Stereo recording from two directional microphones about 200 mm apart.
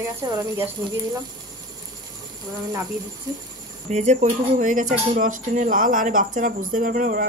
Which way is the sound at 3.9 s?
35° right (ahead or behind).